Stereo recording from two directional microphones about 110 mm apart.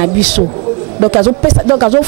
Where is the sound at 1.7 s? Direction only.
20° right (ahead or behind).